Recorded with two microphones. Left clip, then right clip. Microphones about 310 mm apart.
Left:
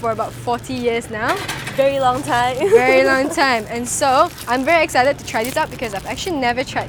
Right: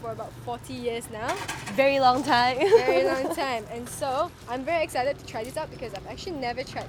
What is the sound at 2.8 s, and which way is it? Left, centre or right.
Speech, left.